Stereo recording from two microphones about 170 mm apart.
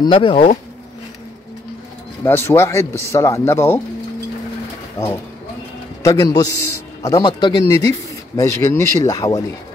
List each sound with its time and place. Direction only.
0.0 s speech: 30° left (ahead or behind)
2.2 s speech: 15° left (ahead or behind)
4.9 s speech: 20° left (ahead or behind)